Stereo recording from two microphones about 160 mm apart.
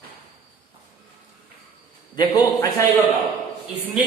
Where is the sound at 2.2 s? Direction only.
20° left (ahead or behind).